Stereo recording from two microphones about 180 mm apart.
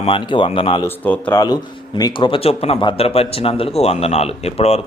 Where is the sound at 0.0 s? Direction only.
30° left (ahead or behind).